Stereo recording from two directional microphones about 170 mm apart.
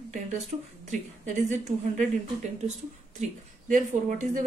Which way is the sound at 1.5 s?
45° right (ahead or behind).